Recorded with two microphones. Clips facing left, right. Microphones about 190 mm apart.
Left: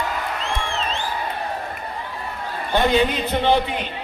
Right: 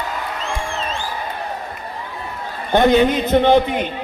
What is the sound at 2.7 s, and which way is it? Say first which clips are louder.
Speech: right 5 dB; 55° right (ahead or behind).